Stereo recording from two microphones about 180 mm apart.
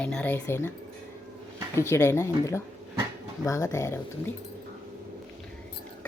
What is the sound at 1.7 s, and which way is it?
A woman's voice, 15° left (ahead or behind).